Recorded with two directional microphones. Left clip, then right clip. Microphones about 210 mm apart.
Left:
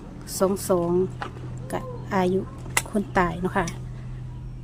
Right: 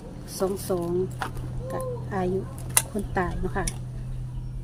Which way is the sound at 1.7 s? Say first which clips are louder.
Left 4 dB; 25° left (ahead or behind).